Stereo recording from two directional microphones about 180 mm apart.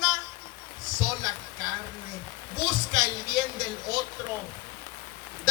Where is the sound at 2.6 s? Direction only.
25° left (ahead or behind).